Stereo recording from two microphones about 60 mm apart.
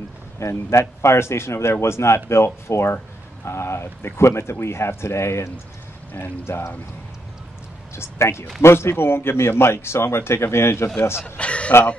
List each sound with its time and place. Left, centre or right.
0.4 s a man's voice: left
7.9 s a man's voice: left
11.3 s a sound: centre